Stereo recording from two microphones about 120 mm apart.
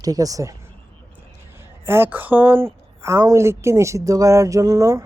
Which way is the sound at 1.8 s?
20° right (ahead or behind).